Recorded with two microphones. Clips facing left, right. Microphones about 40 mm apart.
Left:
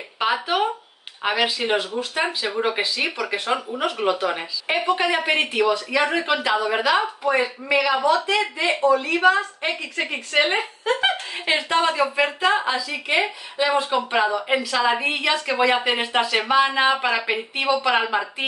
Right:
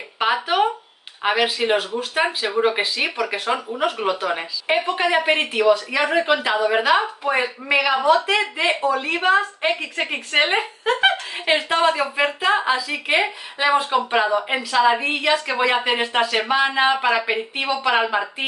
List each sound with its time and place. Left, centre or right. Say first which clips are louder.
0.2 s a sound: right 2 dB; centre
1.2 s a woman's voice: right 2 dB; centre
3.3 s a woman's voice: right 1 dB; centre
8.6 s a woman's voice: left 4 dB; right; by 18.3 s centre